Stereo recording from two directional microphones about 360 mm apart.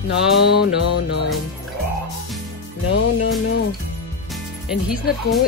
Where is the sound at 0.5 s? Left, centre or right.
Left.